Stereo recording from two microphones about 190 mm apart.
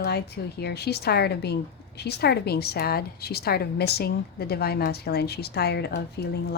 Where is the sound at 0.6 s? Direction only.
60° left (ahead or behind).